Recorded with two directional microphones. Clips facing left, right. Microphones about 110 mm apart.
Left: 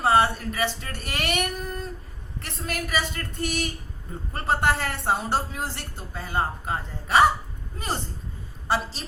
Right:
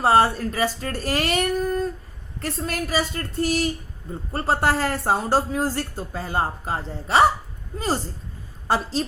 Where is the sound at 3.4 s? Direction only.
30° right (ahead or behind).